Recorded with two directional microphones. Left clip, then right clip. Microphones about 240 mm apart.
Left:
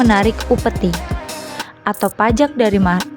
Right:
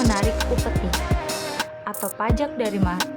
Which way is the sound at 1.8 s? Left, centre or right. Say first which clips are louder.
Left 10 dB; left.